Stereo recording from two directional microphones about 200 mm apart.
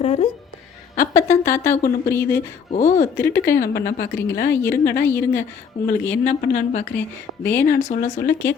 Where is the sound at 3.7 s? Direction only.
50° left (ahead or behind).